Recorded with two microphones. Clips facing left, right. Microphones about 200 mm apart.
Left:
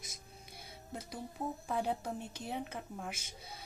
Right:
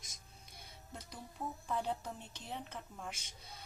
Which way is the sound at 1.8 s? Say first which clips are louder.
Left 4 dB; 10° left (ahead or behind).